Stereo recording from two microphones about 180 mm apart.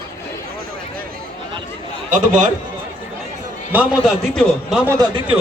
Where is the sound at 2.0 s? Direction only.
45° right (ahead or behind).